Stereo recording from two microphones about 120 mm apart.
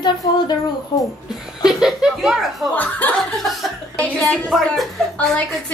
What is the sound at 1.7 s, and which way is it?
Speech, centre (ahead or behind).